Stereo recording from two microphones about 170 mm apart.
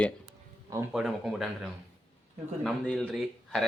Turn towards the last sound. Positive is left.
turn(degrees=0)  # may be behind; listen again after turning